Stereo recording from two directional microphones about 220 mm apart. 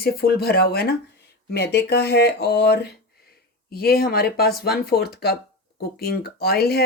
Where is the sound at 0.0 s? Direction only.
45° left (ahead or behind).